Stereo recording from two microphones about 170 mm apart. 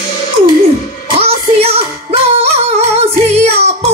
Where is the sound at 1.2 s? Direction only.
35° right (ahead or behind).